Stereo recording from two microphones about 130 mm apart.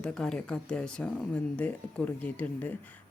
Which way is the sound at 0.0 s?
5° left (ahead or behind).